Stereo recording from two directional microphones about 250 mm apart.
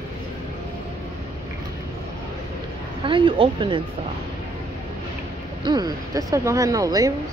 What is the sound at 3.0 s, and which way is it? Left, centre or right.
Speech, centre.